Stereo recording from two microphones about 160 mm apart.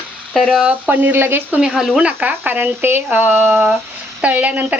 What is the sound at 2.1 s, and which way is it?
Speech, 10° right (ahead or behind).